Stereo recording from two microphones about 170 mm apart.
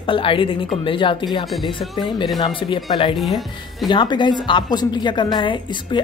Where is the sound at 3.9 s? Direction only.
25° left (ahead or behind).